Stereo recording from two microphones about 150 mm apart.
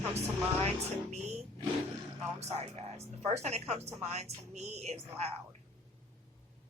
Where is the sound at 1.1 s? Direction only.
50° right (ahead or behind).